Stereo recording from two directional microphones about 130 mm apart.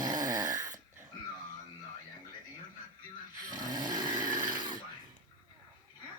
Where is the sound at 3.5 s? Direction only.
30° right (ahead or behind).